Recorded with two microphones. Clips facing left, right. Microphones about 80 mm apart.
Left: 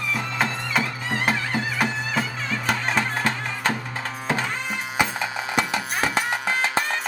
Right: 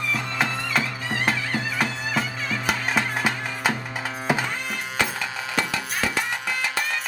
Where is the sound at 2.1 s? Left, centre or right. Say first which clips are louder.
Even; centre.